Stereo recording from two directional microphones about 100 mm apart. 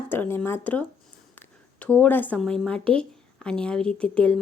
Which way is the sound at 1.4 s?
15° left (ahead or behind).